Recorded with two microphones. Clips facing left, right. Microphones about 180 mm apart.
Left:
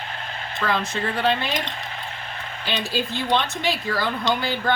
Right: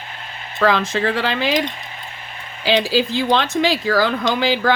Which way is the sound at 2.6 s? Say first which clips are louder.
Right 9 dB; 90° right.